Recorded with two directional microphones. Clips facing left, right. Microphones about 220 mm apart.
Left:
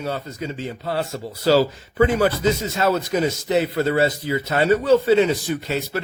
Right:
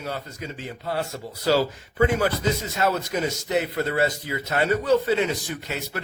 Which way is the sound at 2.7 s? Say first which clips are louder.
Left 4 dB; 30° left (ahead or behind).